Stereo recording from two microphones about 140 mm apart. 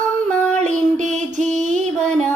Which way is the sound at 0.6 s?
60° right (ahead or behind).